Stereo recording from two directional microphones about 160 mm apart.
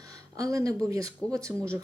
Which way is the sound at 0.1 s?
20° right (ahead or behind).